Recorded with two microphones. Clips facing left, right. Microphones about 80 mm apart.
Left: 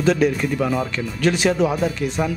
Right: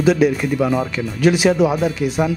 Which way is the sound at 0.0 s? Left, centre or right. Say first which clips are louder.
Right 3 dB; centre.